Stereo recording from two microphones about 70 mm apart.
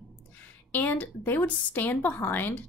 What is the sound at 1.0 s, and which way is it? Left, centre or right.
Speech, left.